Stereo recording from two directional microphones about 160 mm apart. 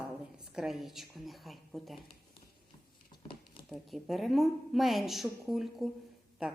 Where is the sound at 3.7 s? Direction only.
Centre (ahead or behind).